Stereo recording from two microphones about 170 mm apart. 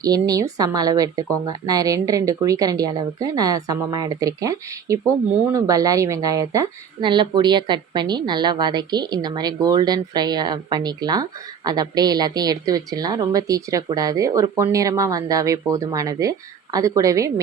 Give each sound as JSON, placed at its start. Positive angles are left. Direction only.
{"t": 0.0, "sound": "speech", "side_deg": -20}